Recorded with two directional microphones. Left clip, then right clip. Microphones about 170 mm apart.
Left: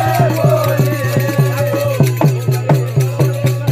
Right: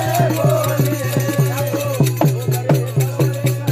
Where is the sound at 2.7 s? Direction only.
40° left (ahead or behind).